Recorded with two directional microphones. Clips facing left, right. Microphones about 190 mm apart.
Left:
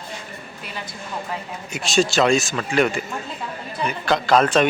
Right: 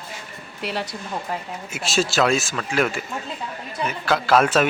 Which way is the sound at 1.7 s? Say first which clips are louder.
Left 3 dB; 5° right (ahead or behind).